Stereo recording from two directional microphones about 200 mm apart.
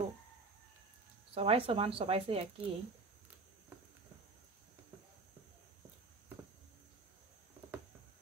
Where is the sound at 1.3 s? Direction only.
30° right (ahead or behind).